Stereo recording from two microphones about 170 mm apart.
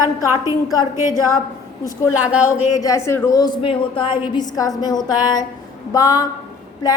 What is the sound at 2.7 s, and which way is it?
A woman's voice, 20° left (ahead or behind).